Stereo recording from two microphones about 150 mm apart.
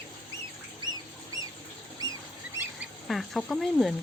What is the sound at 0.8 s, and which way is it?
Squawk, 25° right (ahead or behind).